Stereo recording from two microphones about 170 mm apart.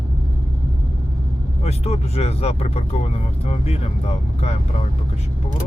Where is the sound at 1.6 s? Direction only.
40° left (ahead or behind).